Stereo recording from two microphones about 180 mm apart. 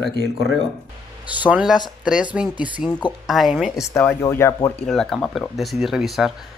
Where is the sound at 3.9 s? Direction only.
15° left (ahead or behind).